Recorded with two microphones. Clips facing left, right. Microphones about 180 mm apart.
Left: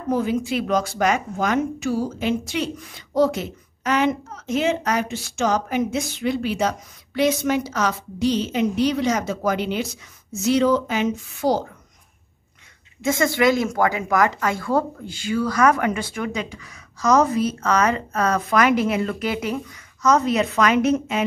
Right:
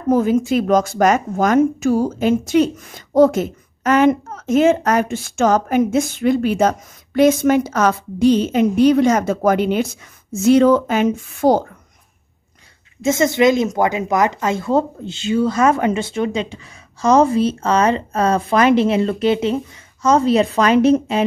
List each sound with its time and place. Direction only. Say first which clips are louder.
0.1 s a woman's voice: right 7 dB; 45° right (ahead or behind)
13.0 s speech: right 4 dB; 20° right (ahead or behind)